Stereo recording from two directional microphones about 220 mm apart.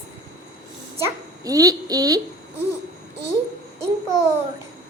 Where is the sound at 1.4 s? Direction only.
15° right (ahead or behind).